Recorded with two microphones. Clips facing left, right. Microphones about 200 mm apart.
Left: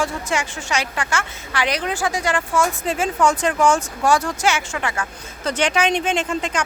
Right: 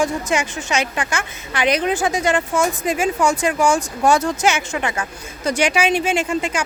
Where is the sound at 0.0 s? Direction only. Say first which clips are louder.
Right 3 dB; 20° right (ahead or behind).